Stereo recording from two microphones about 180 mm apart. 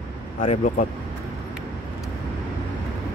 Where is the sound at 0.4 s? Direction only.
50° left (ahead or behind).